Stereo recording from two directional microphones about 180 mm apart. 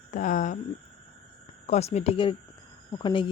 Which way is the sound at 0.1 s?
45° left (ahead or behind).